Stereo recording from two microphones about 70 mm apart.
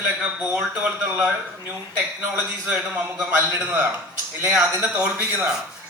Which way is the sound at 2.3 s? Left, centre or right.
Right.